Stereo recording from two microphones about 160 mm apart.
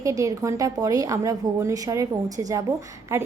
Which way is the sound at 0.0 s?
20° right (ahead or behind).